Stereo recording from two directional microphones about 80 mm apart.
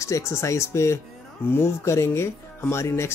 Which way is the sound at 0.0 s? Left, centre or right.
Left.